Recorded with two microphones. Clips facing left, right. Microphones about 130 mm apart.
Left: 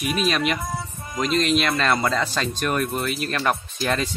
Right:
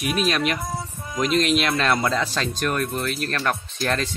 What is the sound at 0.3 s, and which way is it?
Speech, centre (ahead or behind).